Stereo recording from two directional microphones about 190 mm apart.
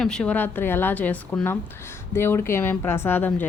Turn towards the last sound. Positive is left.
turn(degrees=10)  # may be behind; listen again after turning